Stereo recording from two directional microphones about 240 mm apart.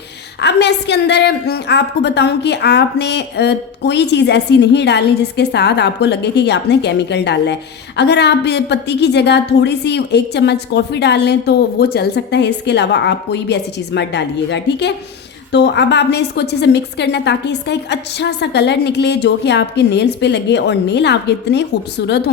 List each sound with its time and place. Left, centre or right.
0.3 s a woman's voice: left